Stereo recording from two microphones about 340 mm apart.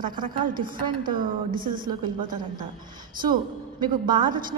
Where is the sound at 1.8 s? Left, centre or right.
Centre.